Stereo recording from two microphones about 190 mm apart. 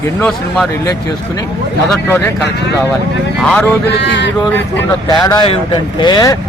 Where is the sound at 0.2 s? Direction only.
5° left (ahead or behind).